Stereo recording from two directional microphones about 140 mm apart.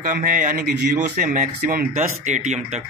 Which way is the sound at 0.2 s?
65° right (ahead or behind).